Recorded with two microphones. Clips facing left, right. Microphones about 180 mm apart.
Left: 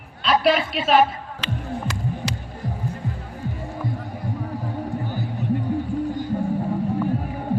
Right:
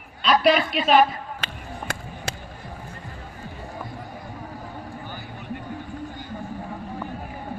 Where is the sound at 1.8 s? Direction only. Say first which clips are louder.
Left 6 dB; 55° right (ahead or behind).